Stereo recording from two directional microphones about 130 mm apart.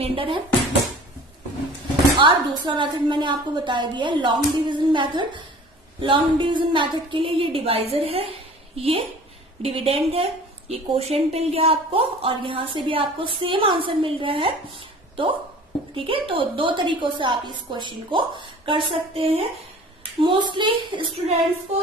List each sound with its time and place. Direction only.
0.0 s speech: 45° right (ahead or behind)
2.1 s a woman's voice: 40° right (ahead or behind)